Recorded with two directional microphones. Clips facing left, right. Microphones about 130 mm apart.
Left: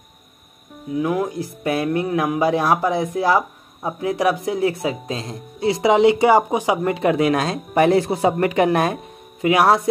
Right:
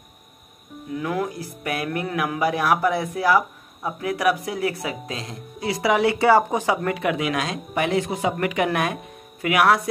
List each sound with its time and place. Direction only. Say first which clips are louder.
0.9 s speech: left 5 dB; 20° left (ahead or behind)
6.9 s speech: left 6 dB; 35° left (ahead or behind)